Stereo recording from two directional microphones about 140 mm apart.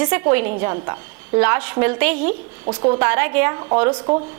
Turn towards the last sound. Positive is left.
turn(degrees=-35)  # may be behind; listen again after turning